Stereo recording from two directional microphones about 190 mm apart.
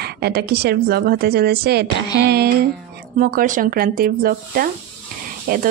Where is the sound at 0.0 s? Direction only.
55° right (ahead or behind).